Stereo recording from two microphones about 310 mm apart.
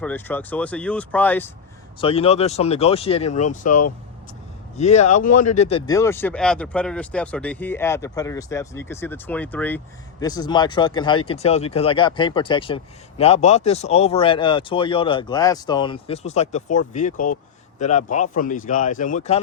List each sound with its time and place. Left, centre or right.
0.0 s speech: centre
2.0 s speech: centre